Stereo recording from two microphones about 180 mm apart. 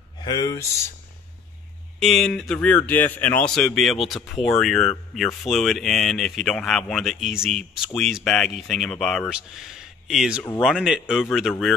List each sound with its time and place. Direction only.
0.2 s speech: 20° left (ahead or behind)
2.0 s speech: centre (ahead or behind)